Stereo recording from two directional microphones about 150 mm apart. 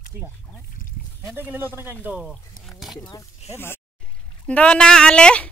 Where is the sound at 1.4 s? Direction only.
15° right (ahead or behind).